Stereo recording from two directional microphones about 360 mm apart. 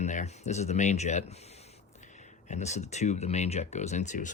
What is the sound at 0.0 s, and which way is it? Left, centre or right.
Speech, centre.